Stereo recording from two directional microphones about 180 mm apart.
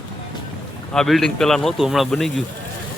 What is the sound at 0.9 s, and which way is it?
Speech, centre (ahead or behind).